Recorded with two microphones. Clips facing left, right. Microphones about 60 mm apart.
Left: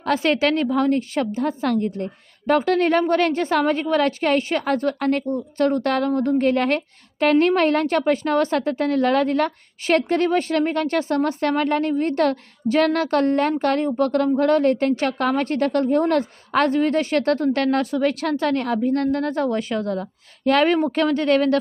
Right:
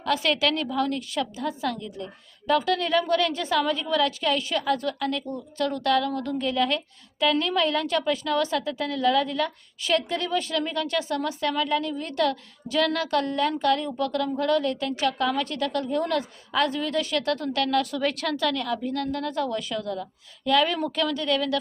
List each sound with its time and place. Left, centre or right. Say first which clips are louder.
0.0 s a woman's voice: left 5 dB; left